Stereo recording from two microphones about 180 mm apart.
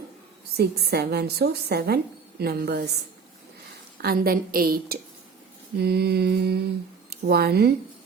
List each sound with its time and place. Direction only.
0.5 s a woman's voice: 65° right (ahead or behind)
4.0 s a woman's voice: 55° right (ahead or behind)